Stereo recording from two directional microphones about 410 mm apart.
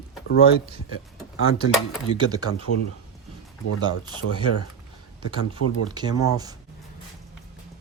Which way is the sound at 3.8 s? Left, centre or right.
Centre.